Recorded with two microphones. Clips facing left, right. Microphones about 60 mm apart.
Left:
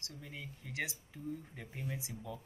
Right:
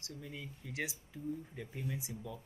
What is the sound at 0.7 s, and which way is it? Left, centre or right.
Speech, centre.